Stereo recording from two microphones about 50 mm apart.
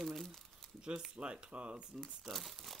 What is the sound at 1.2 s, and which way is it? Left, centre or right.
Speech, centre.